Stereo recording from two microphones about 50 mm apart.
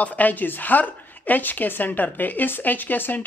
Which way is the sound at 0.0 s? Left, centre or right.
Left.